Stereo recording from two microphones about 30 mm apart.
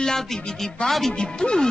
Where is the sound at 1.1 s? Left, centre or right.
Left.